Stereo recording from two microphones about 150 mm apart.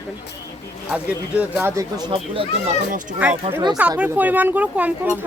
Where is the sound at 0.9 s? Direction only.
10° right (ahead or behind).